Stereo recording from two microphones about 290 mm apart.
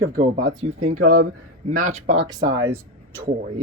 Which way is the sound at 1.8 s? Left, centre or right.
Right.